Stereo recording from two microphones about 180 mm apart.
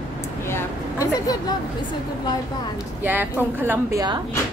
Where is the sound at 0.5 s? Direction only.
15° left (ahead or behind).